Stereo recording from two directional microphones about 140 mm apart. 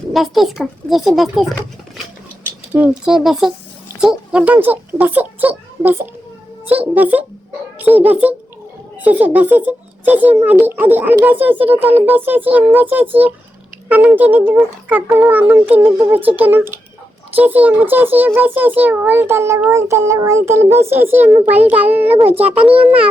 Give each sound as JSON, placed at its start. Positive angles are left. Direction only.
{"t": 0.1, "sound": "a child's voice", "side_deg": 0}
{"t": 2.7, "sound": "a child's voice", "side_deg": -10}